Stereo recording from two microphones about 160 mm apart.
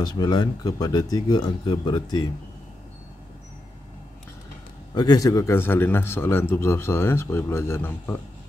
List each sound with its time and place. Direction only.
0.0 s speech: 25° left (ahead or behind)
4.9 s a man's voice: 25° left (ahead or behind)